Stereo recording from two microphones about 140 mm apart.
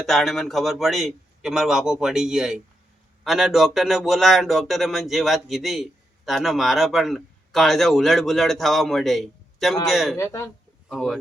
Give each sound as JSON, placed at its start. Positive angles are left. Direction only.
{"t": 0.0, "sound": "speech", "side_deg": 0}
{"t": 10.2, "sound": "speech", "side_deg": 20}
{"t": 10.8, "sound": "speech", "side_deg": 0}